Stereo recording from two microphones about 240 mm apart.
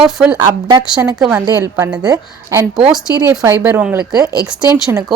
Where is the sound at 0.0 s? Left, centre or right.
Centre.